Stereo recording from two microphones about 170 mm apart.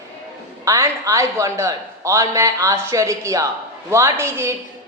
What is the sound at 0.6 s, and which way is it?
A man's voice, 20° right (ahead or behind).